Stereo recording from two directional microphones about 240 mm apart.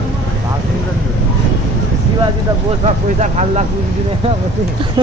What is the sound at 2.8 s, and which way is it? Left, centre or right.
Speech, right.